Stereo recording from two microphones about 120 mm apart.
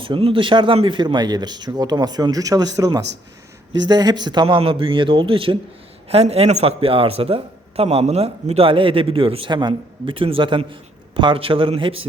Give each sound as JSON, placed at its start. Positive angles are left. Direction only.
{"t": 0.0, "sound": "a man's voice", "side_deg": -50}
{"t": 6.1, "sound": "a man's voice", "side_deg": -60}